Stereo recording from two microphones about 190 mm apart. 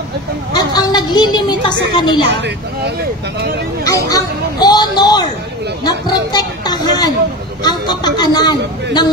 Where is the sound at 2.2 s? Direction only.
65° right (ahead or behind).